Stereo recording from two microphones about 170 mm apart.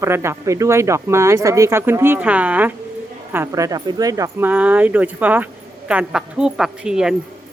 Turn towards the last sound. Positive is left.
turn(degrees=-5)  # may be behind; listen again after turning